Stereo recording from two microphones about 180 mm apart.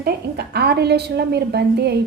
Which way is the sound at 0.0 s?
60° right (ahead or behind).